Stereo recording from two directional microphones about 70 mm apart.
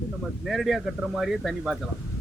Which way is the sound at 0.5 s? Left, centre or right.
Centre.